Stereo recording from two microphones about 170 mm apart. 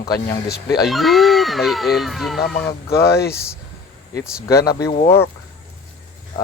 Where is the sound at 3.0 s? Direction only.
70° left (ahead or behind).